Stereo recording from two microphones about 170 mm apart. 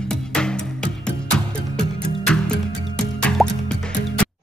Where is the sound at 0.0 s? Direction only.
5° left (ahead or behind).